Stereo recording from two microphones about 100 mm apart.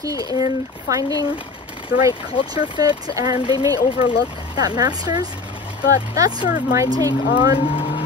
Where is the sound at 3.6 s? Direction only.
40° right (ahead or behind).